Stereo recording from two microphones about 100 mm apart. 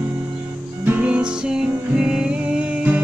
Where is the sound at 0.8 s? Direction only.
15° right (ahead or behind).